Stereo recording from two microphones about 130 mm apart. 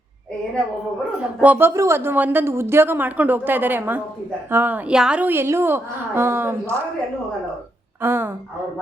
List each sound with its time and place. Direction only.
1.2 s speech: 10° right (ahead or behind)
8.0 s speech: 15° right (ahead or behind)